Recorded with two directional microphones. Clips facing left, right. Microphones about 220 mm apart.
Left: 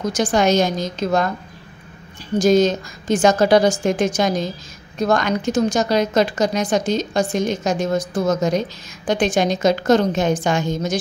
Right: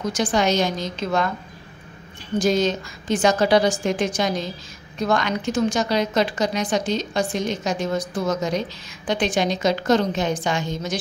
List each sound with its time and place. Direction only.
0.1 s a woman's voice: 45° left (ahead or behind)
2.3 s a woman's voice: 45° left (ahead or behind)